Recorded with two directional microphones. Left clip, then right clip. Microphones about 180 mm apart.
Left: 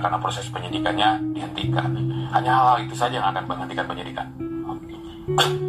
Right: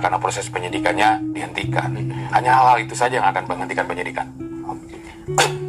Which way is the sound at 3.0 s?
20° right (ahead or behind).